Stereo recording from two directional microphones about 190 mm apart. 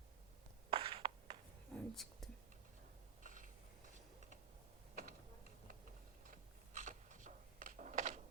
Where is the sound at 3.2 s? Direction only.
40° right (ahead or behind).